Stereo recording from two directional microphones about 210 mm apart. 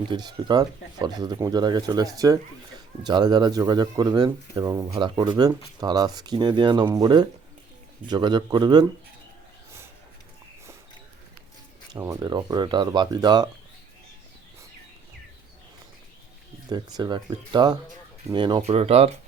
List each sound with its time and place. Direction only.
0.1 s speech: 20° right (ahead or behind)
11.9 s speech: 15° right (ahead or behind)
16.6 s speech: 20° right (ahead or behind)